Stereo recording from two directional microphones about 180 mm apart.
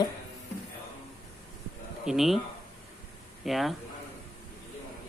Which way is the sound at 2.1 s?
Centre (ahead or behind).